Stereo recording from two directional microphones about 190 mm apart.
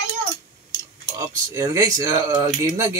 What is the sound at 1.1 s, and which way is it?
Speech, 15° right (ahead or behind).